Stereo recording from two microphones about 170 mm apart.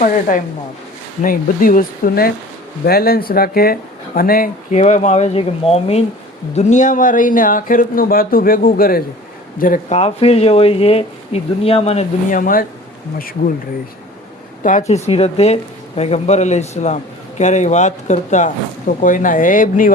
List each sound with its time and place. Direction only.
0.0 s a man's voice: 50° left (ahead or behind)
4.8 s a man's voice: 45° left (ahead or behind)
14.6 s a man's voice: 50° left (ahead or behind)